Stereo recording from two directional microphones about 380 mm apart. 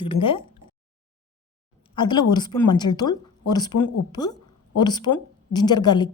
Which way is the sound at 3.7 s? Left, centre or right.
Left.